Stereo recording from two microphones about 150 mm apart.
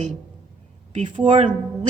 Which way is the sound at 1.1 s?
35° right (ahead or behind).